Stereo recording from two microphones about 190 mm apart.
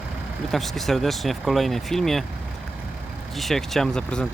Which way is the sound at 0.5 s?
Centre (ahead or behind).